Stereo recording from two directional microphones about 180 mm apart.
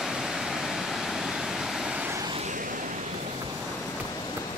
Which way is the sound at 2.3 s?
45° right (ahead or behind).